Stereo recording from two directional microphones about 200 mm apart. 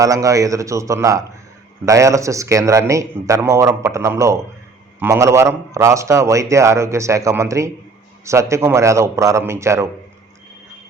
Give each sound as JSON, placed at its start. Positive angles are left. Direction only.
{"t": 0.0, "sound": "a man's voice", "side_deg": -15}